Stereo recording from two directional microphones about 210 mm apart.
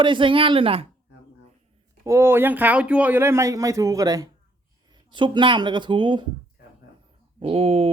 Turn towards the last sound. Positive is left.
turn(degrees=-30)  # may be behind; listen again after turning